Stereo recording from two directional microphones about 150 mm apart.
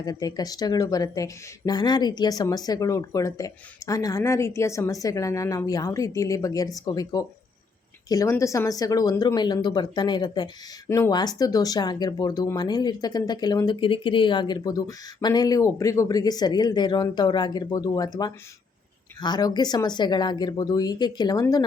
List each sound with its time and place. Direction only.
0.0 s speech: 25° left (ahead or behind)
10.8 s speech: 20° left (ahead or behind)